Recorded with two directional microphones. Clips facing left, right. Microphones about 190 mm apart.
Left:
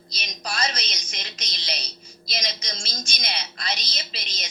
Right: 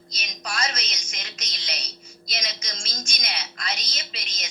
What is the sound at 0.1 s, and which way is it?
A woman's voice, 30° left (ahead or behind).